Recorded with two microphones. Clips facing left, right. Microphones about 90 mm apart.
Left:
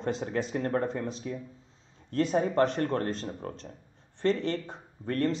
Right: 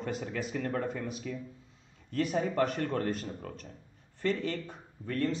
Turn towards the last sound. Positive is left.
turn(degrees=35)  # may be behind; listen again after turning